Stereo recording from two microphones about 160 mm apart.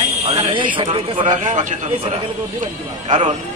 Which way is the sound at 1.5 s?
50° right (ahead or behind).